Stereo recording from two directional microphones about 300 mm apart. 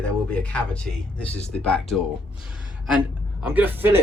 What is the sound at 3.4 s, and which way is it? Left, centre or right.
Speech, centre.